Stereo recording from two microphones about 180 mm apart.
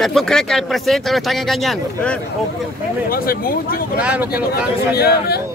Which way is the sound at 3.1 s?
55° left (ahead or behind).